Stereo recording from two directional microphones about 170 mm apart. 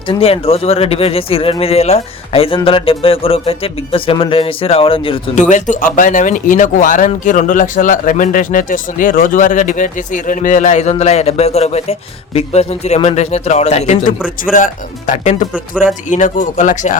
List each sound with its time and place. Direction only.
0.1 s speech: 35° left (ahead or behind)
5.3 s speech: 45° left (ahead or behind)